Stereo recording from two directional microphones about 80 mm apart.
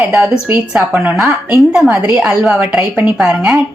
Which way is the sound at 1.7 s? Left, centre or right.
Centre.